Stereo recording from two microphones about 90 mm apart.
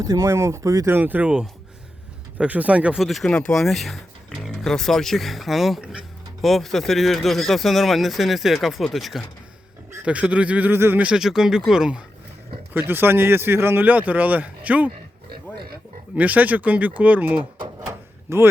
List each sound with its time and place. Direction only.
0.0 s speech: 35° right (ahead or behind)
0.9 s speech: 20° right (ahead or behind)
2.4 s speech: 15° right (ahead or behind)
3.0 s speech: centre (ahead or behind)
10.0 s speech: 15° right (ahead or behind)
11.1 s speech: 5° right (ahead or behind)
12.7 s speech: 25° right (ahead or behind)
16.1 s speech: 15° right (ahead or behind)
18.3 s speech: 30° right (ahead or behind)